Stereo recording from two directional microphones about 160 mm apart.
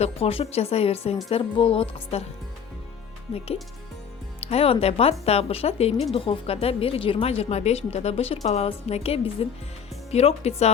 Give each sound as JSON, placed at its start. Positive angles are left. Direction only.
{"t": 0.0, "sound": "a woman's voice", "side_deg": 35}
{"t": 3.3, "sound": "a woman's voice", "side_deg": 40}